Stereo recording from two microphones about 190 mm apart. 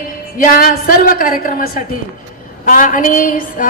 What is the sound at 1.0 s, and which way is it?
A woman's voice, 45° left (ahead or behind).